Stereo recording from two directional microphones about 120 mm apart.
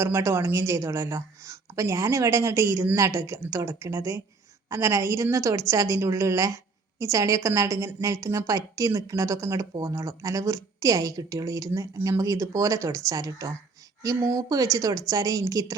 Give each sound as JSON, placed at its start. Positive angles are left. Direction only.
{"t": 0.0, "sound": "speech", "side_deg": -25}